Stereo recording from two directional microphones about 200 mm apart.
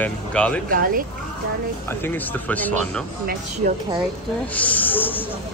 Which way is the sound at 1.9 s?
10° left (ahead or behind).